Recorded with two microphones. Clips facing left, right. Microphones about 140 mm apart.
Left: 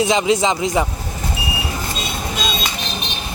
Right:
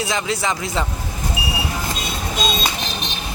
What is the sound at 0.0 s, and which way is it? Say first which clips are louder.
Speech: left 7 dB; 20° left (ahead or behind).